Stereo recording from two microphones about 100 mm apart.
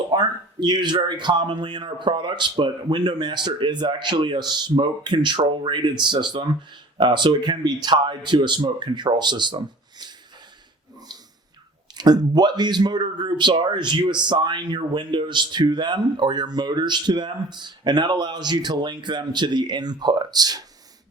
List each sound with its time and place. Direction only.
0.1 s speech: 45° right (ahead or behind)
11.9 s speech: 40° right (ahead or behind)